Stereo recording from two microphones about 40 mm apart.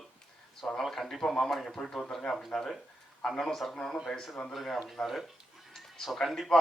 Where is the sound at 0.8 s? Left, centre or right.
Centre.